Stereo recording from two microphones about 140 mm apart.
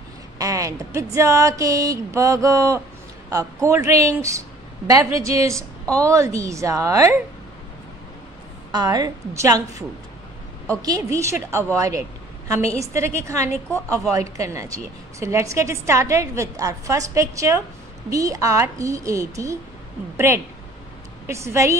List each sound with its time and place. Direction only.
0.4 s a woman's voice: 25° right (ahead or behind)
8.7 s a woman's voice: 30° right (ahead or behind)
13.7 s a woman's voice: 10° left (ahead or behind)
14.3 s a woman's voice: 25° right (ahead or behind)